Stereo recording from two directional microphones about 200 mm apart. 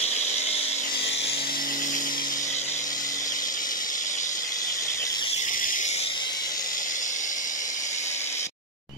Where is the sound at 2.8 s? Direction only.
20° left (ahead or behind).